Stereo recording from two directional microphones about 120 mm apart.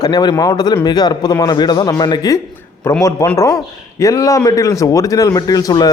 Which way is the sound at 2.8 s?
25° left (ahead or behind).